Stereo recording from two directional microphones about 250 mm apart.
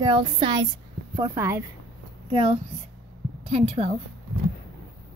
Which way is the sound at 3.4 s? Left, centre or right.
Right.